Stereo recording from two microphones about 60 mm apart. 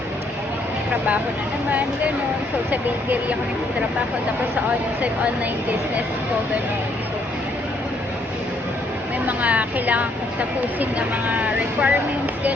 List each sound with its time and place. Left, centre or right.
9.2 s a woman's voice: right
11.3 s a woman's voice: right